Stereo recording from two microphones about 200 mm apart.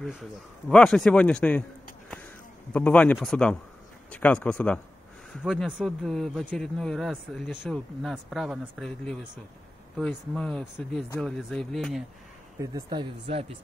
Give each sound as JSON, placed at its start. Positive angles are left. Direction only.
{"t": 0.0, "sound": "speech", "side_deg": 0}
{"t": 2.7, "sound": "speech", "side_deg": 5}
{"t": 12.5, "sound": "speech", "side_deg": -20}